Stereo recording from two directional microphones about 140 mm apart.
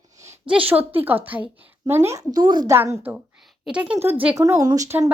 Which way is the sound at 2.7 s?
15° right (ahead or behind).